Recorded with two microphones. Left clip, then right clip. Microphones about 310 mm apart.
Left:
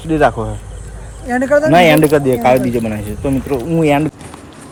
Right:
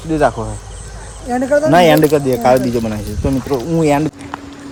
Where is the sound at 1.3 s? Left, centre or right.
Left.